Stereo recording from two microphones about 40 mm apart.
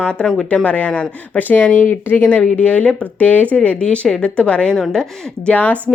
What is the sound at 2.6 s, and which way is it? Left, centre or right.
A woman's voice, left.